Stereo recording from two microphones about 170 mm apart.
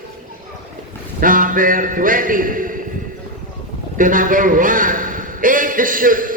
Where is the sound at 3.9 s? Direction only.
50° right (ahead or behind).